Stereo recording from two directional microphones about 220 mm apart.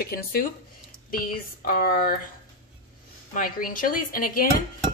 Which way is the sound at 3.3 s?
40° left (ahead or behind).